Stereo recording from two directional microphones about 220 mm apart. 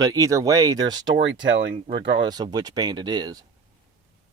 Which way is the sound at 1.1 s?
55° right (ahead or behind).